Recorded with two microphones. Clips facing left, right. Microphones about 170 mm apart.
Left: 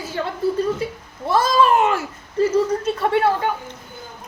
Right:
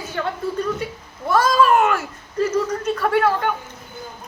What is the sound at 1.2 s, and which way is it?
Cat, 25° left (ahead or behind).